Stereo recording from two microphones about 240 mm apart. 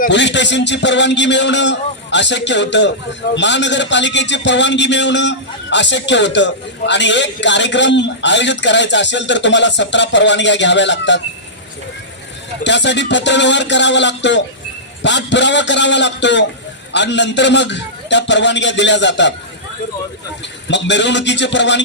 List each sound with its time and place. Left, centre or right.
0.1 s a man's voice: left
12.6 s a man's voice: left
20.7 s a man's voice: left